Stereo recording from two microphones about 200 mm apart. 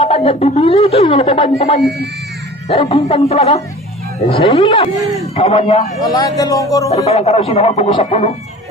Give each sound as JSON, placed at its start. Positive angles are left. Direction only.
{"t": 0.0, "sound": "a man's voice", "side_deg": 30}
{"t": 6.9, "sound": "speech", "side_deg": 35}